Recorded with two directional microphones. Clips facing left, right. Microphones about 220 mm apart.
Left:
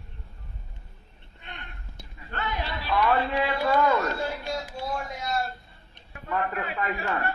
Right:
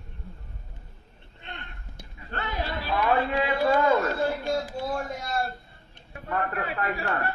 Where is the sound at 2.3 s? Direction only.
40° right (ahead or behind).